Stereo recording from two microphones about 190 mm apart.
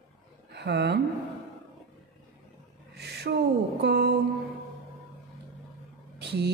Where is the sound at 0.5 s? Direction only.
60° right (ahead or behind).